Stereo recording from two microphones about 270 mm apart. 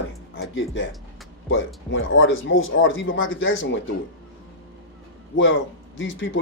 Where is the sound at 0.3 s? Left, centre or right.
Left.